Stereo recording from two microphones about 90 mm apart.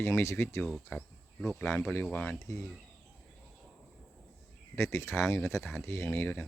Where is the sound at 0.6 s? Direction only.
Centre (ahead or behind).